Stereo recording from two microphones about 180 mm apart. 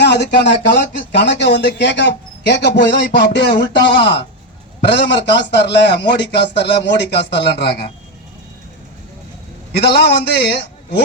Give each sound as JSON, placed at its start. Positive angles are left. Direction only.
{"t": 0.0, "sound": "speech", "side_deg": 70}
{"t": 9.7, "sound": "a man's voice", "side_deg": 65}